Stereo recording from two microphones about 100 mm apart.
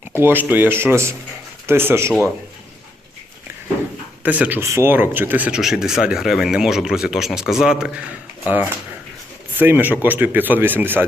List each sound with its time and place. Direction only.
0.2 s speech: 20° right (ahead or behind)
4.2 s speech: 15° right (ahead or behind)
4.6 s speech: 25° right (ahead or behind)
5.5 s speech: 5° right (ahead or behind)
8.4 s speech: 20° right (ahead or behind)